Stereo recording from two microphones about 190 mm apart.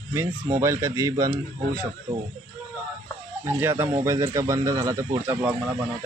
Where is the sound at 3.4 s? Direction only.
10° right (ahead or behind).